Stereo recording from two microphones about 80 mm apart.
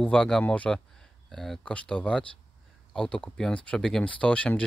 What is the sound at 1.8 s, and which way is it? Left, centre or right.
Speech, centre.